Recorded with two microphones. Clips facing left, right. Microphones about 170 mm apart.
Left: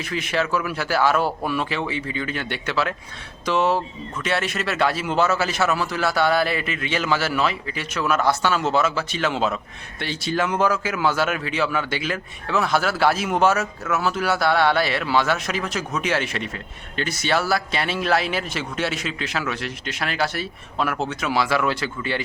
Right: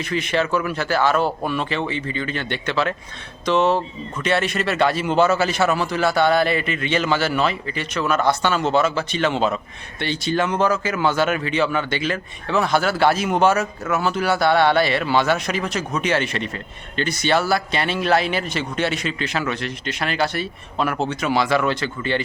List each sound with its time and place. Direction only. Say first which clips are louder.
0.0 s speech: right 3 dB; 5° left (ahead or behind)